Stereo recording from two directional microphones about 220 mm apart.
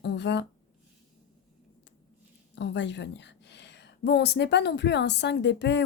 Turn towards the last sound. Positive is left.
turn(degrees=55)  # may be behind; listen again after turning